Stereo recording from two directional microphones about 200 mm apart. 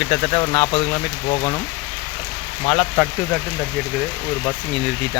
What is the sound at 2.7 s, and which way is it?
Speech, 5° left (ahead or behind).